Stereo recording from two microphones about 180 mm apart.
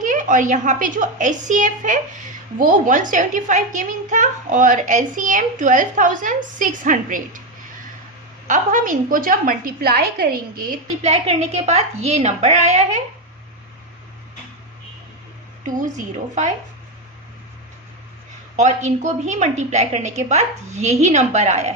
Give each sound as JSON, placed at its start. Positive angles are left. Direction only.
{"t": 0.0, "sound": "a woman's voice", "side_deg": -45}
{"t": 8.4, "sound": "a woman's voice", "side_deg": -45}
{"t": 10.8, "sound": "a woman's voice", "side_deg": -35}
{"t": 18.5, "sound": "a woman's voice", "side_deg": -40}